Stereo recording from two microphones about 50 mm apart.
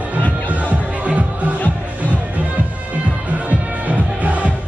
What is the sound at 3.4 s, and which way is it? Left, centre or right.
Music, right.